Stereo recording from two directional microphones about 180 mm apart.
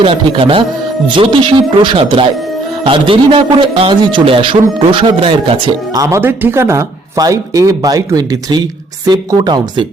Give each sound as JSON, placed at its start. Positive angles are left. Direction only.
{"t": 0.0, "sound": "speech", "side_deg": -30}